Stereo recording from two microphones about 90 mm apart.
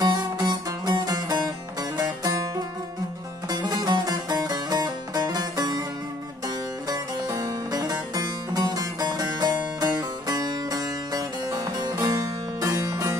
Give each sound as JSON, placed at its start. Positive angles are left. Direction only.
{"t": 0.0, "sound": "music", "side_deg": -50}